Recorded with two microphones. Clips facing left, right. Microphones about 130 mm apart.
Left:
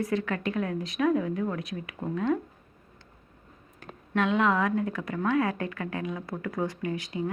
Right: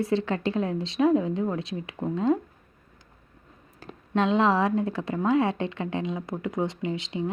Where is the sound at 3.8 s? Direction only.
30° right (ahead or behind).